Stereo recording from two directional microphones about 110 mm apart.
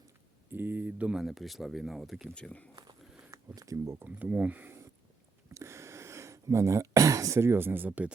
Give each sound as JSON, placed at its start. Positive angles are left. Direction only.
{"t": 0.5, "sound": "speech", "side_deg": -15}
{"t": 2.3, "sound": "speech", "side_deg": 10}
{"t": 3.3, "sound": "speech", "side_deg": -30}
{"t": 4.0, "sound": "speech", "side_deg": -15}